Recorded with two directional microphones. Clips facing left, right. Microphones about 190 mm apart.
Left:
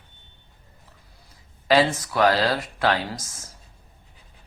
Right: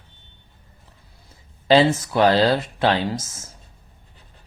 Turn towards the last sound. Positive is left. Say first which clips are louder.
# right 6 dB
turn(degrees=-25)  # may be behind; listen again after turning